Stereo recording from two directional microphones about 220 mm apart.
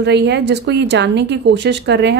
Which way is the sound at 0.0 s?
50° right (ahead or behind).